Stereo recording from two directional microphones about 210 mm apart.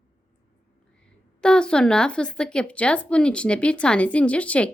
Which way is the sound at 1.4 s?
5° left (ahead or behind).